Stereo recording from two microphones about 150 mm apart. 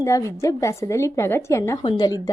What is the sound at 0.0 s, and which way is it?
Speech, 20° left (ahead or behind).